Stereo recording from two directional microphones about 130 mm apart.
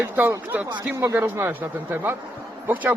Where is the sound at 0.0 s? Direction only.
15° right (ahead or behind).